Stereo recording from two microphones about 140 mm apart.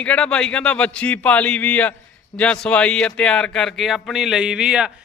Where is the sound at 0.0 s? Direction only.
10° left (ahead or behind).